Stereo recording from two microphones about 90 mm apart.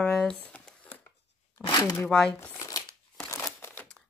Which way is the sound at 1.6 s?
15° left (ahead or behind).